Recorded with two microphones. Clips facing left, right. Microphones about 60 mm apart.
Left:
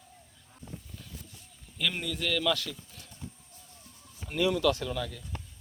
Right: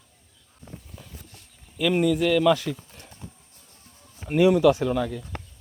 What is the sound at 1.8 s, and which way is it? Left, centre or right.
Speech, centre.